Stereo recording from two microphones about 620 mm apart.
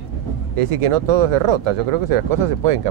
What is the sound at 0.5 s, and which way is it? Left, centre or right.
Speech, right.